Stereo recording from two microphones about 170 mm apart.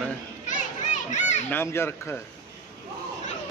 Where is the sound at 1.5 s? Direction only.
15° left (ahead or behind).